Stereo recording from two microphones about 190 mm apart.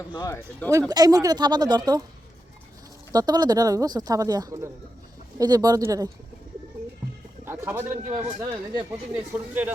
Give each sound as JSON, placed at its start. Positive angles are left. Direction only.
{"t": 0.3, "sound": "speech", "side_deg": 10}
{"t": 0.7, "sound": "speech", "side_deg": -15}
{"t": 3.1, "sound": "speech", "side_deg": -20}
{"t": 7.4, "sound": "a man's voice", "side_deg": -15}
{"t": 8.0, "sound": "a man's voice", "side_deg": -35}
{"t": 8.9, "sound": "speech", "side_deg": -10}